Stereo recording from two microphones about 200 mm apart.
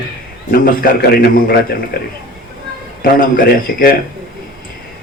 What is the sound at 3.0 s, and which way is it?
Speech, 45° left (ahead or behind).